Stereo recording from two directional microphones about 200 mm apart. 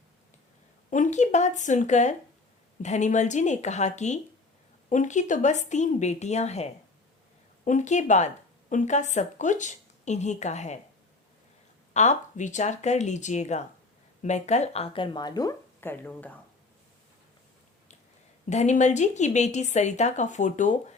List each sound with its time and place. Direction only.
0.9 s a woman's voice: 40° left (ahead or behind)
11.9 s a woman's voice: 35° left (ahead or behind); by 16.3 s 10° left (ahead or behind)
18.4 s a woman's voice: 35° left (ahead or behind)